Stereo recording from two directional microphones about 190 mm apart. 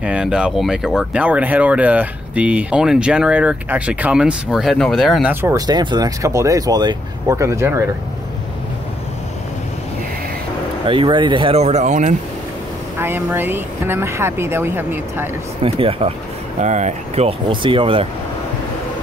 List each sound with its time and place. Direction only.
0.0 s speech: 5° right (ahead or behind)
5.3 s speech: 15° right (ahead or behind)
10.9 s speech: 25° right (ahead or behind)
13.0 s speech: 10° right (ahead or behind)
15.6 s speech: 30° right (ahead or behind)